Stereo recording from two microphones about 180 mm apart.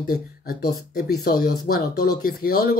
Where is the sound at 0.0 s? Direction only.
60° left (ahead or behind).